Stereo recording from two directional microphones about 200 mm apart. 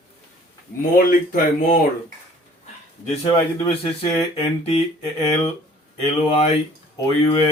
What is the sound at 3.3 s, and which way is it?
Speech, 25° left (ahead or behind).